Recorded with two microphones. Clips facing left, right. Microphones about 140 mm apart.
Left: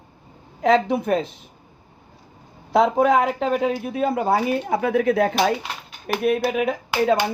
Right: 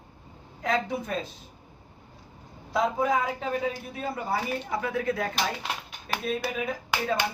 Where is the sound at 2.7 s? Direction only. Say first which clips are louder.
Left 8 dB; 75° left (ahead or behind).